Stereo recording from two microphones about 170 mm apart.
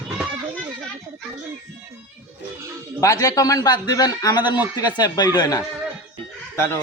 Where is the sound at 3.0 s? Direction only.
20° left (ahead or behind).